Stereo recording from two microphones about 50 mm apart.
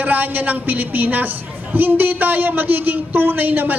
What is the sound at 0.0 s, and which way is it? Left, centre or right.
A woman's voice, right.